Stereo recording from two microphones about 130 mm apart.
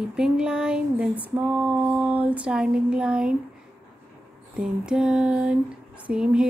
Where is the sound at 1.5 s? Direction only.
15° right (ahead or behind).